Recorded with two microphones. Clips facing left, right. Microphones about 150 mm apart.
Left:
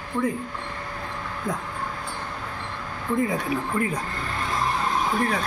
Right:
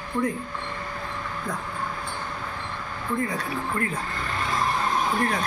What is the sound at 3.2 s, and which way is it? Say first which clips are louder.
Speech: left 3 dB; 20° left (ahead or behind).